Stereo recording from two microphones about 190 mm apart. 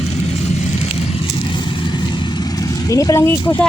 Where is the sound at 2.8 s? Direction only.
15° left (ahead or behind).